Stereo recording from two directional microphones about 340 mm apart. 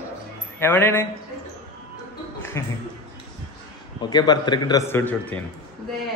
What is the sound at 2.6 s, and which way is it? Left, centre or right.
Speech, centre.